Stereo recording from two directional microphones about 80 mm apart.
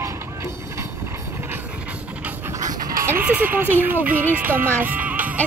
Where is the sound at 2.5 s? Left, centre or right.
Right.